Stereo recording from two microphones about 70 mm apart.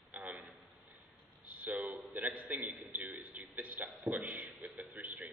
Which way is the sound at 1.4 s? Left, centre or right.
Right.